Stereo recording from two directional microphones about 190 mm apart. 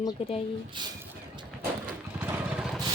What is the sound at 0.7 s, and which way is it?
Speech, 25° right (ahead or behind).